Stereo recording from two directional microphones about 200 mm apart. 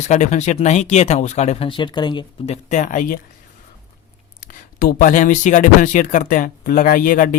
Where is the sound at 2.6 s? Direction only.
40° left (ahead or behind).